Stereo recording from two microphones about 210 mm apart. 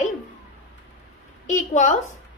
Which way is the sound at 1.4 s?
35° left (ahead or behind).